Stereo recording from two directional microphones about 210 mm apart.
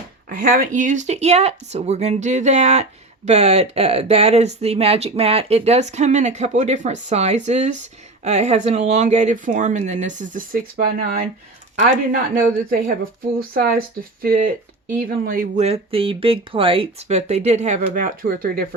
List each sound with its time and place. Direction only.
0.3 s speech: 40° right (ahead or behind)